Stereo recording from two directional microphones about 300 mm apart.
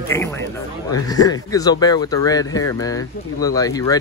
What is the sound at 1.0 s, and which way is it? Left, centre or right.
Speech, centre.